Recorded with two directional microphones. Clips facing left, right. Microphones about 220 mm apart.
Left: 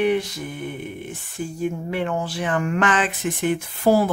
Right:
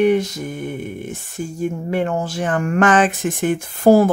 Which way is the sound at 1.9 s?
45° right (ahead or behind).